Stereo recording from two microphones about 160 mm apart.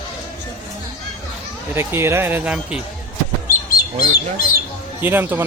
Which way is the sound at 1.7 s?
15° right (ahead or behind).